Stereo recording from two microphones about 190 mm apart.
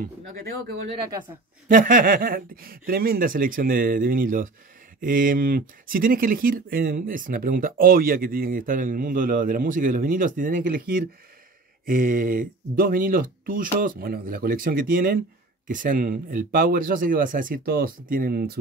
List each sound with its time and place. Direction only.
1.7 s speech: 45° right (ahead or behind)